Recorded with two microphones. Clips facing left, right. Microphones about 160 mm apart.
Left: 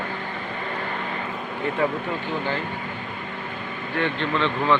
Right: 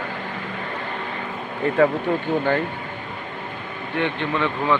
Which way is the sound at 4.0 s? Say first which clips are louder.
Right 1 dB; 15° right (ahead or behind).